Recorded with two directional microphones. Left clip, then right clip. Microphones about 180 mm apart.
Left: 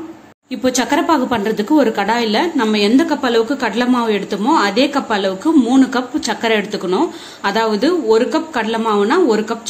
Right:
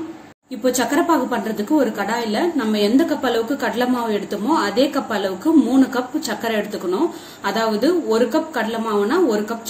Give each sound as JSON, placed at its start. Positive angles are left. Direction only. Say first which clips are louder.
{"t": 0.7, "sound": "a woman's voice", "louder": "left 4 dB", "side_deg": 45}